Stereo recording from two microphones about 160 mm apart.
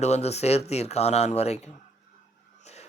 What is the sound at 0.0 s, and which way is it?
A man's voice, 40° left (ahead or behind).